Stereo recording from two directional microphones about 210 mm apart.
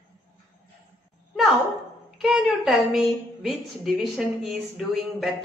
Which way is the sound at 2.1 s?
Centre (ahead or behind).